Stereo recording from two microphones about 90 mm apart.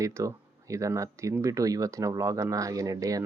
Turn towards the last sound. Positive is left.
turn(degrees=-40)  # may be behind; listen again after turning